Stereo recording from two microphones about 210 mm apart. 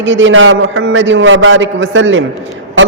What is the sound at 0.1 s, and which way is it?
A man's voice, 65° right (ahead or behind).